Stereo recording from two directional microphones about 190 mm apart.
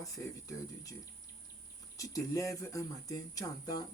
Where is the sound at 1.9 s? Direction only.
15° left (ahead or behind).